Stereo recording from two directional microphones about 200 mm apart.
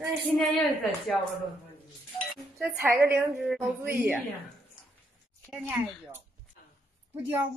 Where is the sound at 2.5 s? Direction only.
10° right (ahead or behind).